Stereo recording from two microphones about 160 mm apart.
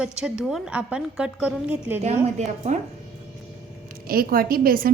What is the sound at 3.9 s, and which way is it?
Speech, 65° right (ahead or behind).